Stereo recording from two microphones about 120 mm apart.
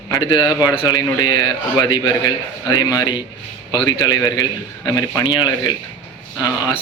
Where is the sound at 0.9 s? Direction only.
30° left (ahead or behind).